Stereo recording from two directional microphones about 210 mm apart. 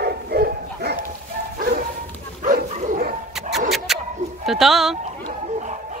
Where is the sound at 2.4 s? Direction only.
35° right (ahead or behind).